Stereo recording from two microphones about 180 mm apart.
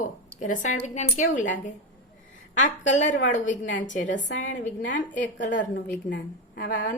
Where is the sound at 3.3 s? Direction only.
45° left (ahead or behind).